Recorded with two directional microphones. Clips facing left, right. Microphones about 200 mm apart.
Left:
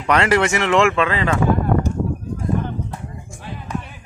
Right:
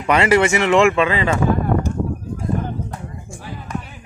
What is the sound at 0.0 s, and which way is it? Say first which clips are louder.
Speech: right 2 dB; 5° right (ahead or behind).